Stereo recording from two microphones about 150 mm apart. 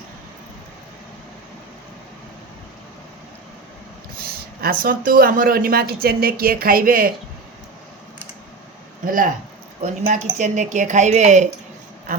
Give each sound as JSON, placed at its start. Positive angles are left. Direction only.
{"t": 4.6, "sound": "speech", "side_deg": -75}
{"t": 9.0, "sound": "speech", "side_deg": -65}
{"t": 9.8, "sound": "speech", "side_deg": -55}